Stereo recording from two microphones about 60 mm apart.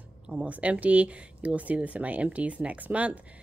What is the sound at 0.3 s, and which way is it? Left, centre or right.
Speech, right.